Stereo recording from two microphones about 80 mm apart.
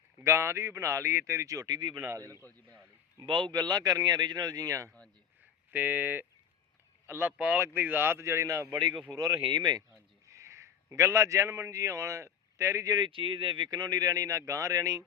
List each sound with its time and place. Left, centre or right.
0.2 s speech: right
1.6 s a man's voice: right
2.1 s speech: right
2.4 s a man's voice: left
3.2 s a man's voice: right
5.7 s speech: right
8.7 s a man's voice: right
9.0 s speech: right
9.4 s speech: right
10.2 s a man's voice: right
13.0 s speech: right